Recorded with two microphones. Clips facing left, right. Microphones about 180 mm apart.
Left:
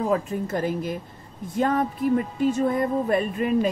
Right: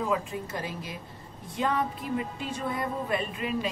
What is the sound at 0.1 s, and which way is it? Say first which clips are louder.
A woman's voice: left 6 dB; 45° left (ahead or behind).